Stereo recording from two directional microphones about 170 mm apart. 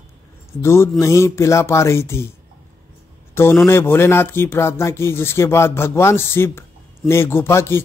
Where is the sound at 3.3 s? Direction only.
15° left (ahead or behind).